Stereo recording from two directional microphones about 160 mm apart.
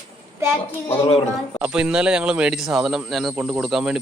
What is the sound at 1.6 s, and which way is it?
Speech, 5° right (ahead or behind).